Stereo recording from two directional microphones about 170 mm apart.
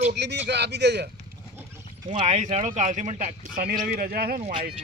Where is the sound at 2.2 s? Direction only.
45° right (ahead or behind).